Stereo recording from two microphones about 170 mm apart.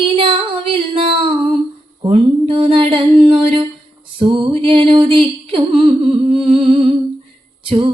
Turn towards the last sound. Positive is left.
turn(degrees=-30)  # may be behind; listen again after turning